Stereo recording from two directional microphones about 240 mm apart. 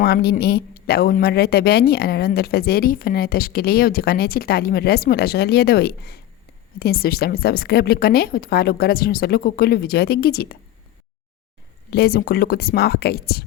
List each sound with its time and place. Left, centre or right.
0.0 s speech: left
11.9 s speech: left